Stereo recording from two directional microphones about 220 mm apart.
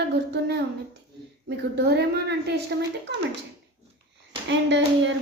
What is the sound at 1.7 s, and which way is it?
Speech, 50° right (ahead or behind).